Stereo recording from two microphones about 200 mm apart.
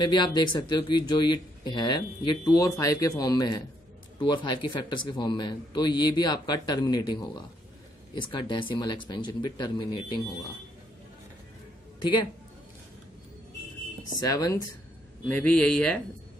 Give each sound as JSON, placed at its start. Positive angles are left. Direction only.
{"t": 0.0, "sound": "speech", "side_deg": 20}
{"t": 12.0, "sound": "a man's voice", "side_deg": 25}
{"t": 14.2, "sound": "speech", "side_deg": 20}
{"t": 15.2, "sound": "a man's voice", "side_deg": 5}